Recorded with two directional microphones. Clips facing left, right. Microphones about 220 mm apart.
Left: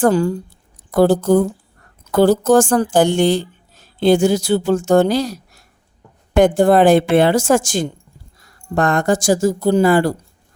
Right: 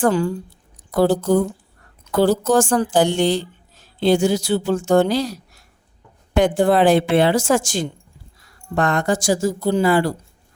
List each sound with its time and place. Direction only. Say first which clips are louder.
0.0 s speech: left 3 dB; 40° left (ahead or behind)